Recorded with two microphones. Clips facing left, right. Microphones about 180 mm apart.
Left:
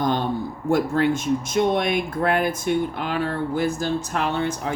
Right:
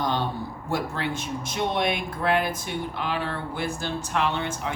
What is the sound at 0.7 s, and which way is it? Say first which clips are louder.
Speech: left 9 dB; 45° left (ahead or behind).